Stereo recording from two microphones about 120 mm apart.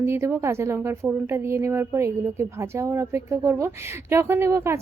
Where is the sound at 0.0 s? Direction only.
20° right (ahead or behind).